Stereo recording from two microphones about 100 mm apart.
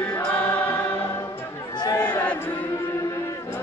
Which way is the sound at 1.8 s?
40° left (ahead or behind).